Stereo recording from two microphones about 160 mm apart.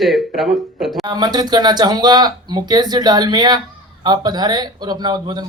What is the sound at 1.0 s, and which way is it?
Speech, 25° right (ahead or behind).